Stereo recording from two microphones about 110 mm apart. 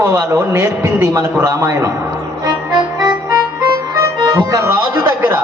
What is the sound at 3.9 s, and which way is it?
Speech, 30° right (ahead or behind).